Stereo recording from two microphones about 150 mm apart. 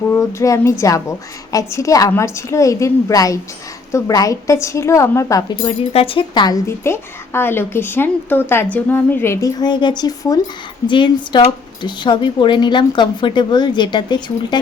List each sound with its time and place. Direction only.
0.1 s speech: 20° left (ahead or behind)
5.6 s speech: 40° left (ahead or behind)